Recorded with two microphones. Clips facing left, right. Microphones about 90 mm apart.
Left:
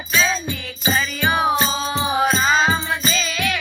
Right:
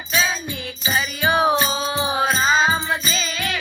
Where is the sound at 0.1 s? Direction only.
15° right (ahead or behind).